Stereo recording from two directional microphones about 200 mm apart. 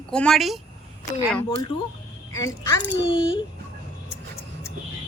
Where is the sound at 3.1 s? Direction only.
25° left (ahead or behind).